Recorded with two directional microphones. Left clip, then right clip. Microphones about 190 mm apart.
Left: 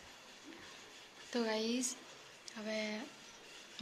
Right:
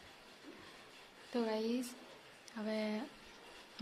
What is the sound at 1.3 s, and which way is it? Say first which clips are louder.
Speech: left 1 dB; 5° right (ahead or behind).